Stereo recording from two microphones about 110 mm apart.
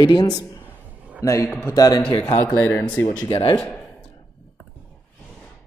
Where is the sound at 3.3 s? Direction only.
55° left (ahead or behind).